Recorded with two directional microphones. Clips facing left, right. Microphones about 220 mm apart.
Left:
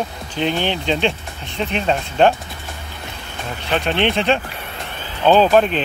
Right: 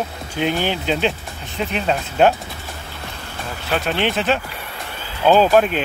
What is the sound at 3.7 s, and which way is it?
Speech, 5° right (ahead or behind).